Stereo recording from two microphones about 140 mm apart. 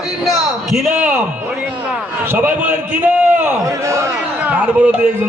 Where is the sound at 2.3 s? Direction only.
15° right (ahead or behind).